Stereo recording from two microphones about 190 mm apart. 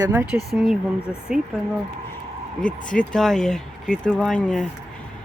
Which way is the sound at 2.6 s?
5° left (ahead or behind).